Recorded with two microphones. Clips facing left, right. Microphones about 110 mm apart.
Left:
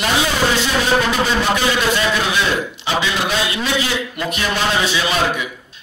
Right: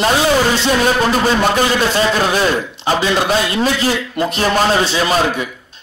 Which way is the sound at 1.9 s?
40° right (ahead or behind).